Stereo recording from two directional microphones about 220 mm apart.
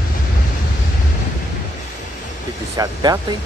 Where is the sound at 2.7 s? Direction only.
15° right (ahead or behind).